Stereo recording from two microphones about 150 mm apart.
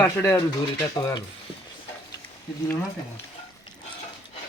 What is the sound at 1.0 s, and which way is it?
Speech, 25° left (ahead or behind).